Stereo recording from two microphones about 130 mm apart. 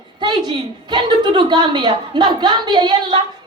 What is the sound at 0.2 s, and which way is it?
A woman's voice, 35° right (ahead or behind).